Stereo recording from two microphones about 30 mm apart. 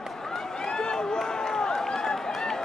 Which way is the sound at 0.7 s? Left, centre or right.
Left.